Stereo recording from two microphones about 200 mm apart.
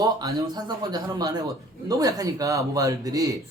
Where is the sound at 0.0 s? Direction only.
20° right (ahead or behind).